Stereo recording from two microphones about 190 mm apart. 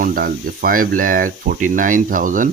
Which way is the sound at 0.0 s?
50° right (ahead or behind).